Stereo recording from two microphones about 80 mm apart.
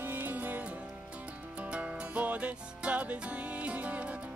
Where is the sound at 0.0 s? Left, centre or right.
Right.